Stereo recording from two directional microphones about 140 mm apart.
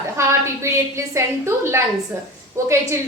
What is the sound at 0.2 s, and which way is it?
A woman's voice, 20° right (ahead or behind).